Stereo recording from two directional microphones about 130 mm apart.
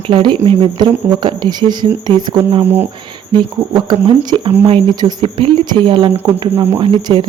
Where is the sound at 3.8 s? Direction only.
35° right (ahead or behind).